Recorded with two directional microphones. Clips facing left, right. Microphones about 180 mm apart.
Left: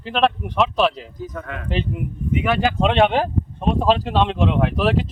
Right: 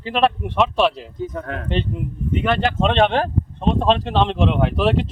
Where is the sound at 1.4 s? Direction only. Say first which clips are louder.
Right 3 dB; 35° right (ahead or behind).